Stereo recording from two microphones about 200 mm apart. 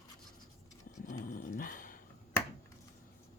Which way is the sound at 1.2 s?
45° left (ahead or behind).